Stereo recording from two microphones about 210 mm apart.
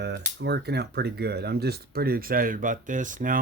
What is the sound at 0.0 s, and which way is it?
Speech, 50° right (ahead or behind).